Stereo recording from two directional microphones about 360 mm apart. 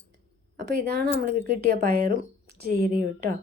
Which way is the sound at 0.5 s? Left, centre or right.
Right.